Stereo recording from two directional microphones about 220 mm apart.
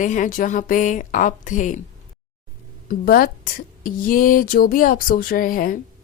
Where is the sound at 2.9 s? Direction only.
40° left (ahead or behind).